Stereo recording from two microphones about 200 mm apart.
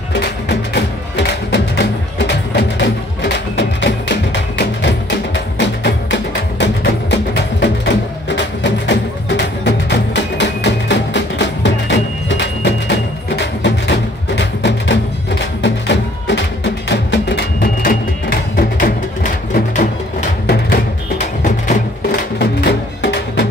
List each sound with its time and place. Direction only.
0.1 s music: 60° left (ahead or behind); by 21.7 s 35° left (ahead or behind)
22.4 s music: 55° left (ahead or behind)